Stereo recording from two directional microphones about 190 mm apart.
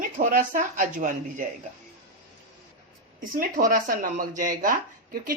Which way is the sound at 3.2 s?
50° right (ahead or behind).